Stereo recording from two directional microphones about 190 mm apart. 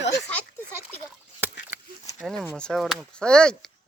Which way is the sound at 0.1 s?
10° left (ahead or behind).